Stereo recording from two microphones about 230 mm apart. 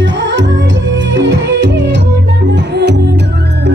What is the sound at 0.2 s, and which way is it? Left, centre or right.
Music, right.